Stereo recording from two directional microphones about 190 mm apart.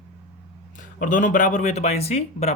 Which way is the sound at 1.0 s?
40° left (ahead or behind).